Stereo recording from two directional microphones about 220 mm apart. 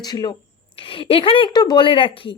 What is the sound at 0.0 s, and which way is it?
A woman's voice, 20° left (ahead or behind).